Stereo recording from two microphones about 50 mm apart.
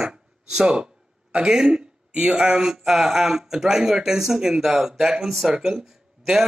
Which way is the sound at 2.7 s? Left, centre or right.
Centre.